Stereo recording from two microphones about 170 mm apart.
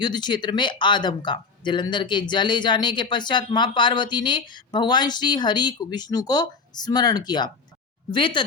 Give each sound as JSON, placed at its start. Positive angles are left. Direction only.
{"t": 0.0, "sound": "speech", "side_deg": 25}